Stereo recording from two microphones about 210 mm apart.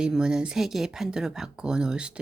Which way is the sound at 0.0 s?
5° right (ahead or behind).